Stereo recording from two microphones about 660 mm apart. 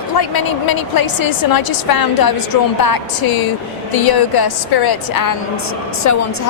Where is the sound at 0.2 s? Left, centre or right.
Left.